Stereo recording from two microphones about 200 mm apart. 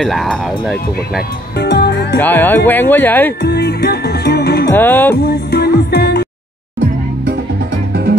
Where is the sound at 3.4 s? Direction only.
55° left (ahead or behind).